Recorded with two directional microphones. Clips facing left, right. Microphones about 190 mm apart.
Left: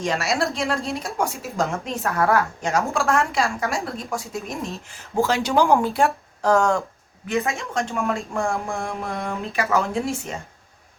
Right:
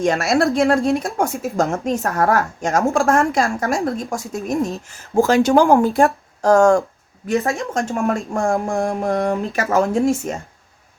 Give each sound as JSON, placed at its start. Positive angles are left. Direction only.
{"t": 0.0, "sound": "speech", "side_deg": -55}
{"t": 1.7, "sound": "speech", "side_deg": -45}